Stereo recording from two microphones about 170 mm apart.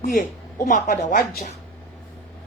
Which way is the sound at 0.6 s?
50° left (ahead or behind).